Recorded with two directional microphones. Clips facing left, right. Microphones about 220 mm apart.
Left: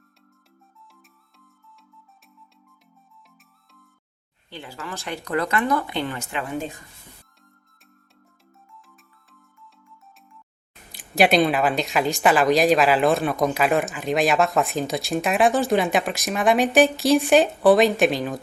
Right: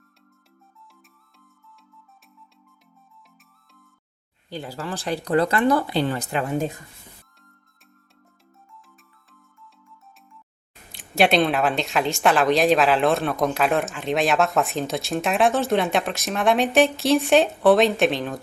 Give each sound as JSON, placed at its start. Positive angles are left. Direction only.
{"t": 4.4, "sound": "speech", "side_deg": -40}
{"t": 10.9, "sound": "speech", "side_deg": 0}